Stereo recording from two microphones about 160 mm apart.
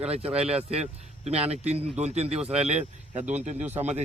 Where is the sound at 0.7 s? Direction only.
40° right (ahead or behind).